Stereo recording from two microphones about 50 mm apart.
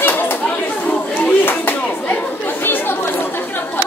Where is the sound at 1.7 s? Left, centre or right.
Left.